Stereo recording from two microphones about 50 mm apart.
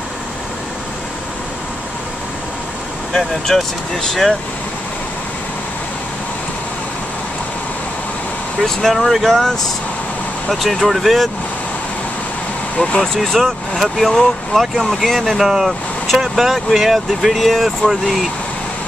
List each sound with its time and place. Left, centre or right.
3.2 s speech: centre
8.5 s speech: centre
12.7 s speech: centre
13.2 s speech: centre
15.3 s speech: centre